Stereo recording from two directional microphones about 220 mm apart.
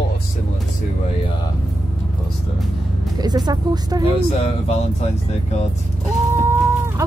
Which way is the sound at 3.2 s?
20° right (ahead or behind).